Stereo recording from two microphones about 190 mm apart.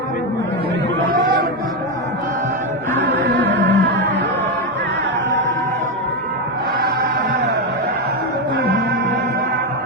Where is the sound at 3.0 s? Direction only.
70° right (ahead or behind).